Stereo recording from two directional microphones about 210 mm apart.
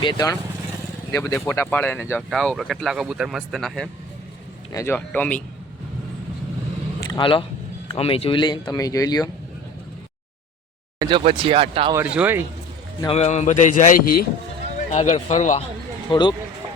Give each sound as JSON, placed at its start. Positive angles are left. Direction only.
{"t": 0.0, "sound": "speech", "side_deg": 20}
{"t": 4.7, "sound": "speech", "side_deg": 10}
{"t": 7.0, "sound": "a sound", "side_deg": 20}
{"t": 7.9, "sound": "speech", "side_deg": 25}
{"t": 11.0, "sound": "speech", "side_deg": -25}
{"t": 11.9, "sound": "speech", "side_deg": -10}
{"t": 13.1, "sound": "a man's voice", "side_deg": 30}
{"t": 16.0, "sound": "speech", "side_deg": 20}